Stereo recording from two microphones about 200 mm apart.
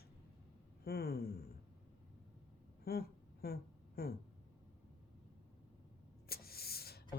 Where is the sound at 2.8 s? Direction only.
50° left (ahead or behind).